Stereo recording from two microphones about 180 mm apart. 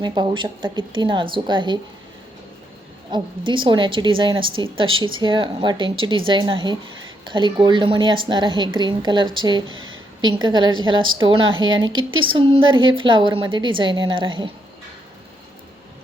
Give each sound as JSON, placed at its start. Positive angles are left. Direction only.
{"t": 0.0, "sound": "a woman's voice", "side_deg": -25}
{"t": 3.1, "sound": "a woman's voice", "side_deg": -30}
{"t": 11.4, "sound": "speech", "side_deg": -90}
{"t": 12.2, "sound": "a woman's voice", "side_deg": -30}